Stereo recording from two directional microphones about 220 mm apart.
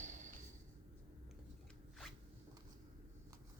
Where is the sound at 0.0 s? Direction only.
35° right (ahead or behind).